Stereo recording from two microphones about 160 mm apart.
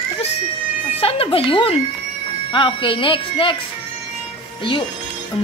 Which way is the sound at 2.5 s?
30° left (ahead or behind).